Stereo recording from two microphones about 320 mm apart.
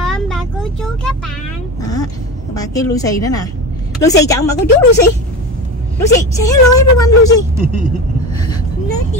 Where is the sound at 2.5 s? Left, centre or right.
Centre.